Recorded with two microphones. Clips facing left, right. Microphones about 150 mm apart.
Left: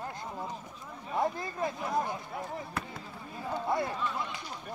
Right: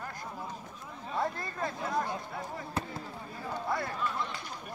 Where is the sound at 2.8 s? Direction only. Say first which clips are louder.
Right 5 dB; 25° right (ahead or behind).